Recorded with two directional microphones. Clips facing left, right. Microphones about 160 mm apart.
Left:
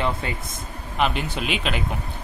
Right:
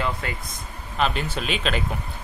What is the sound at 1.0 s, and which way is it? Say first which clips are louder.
Speech: left 1 dB; 15° left (ahead or behind).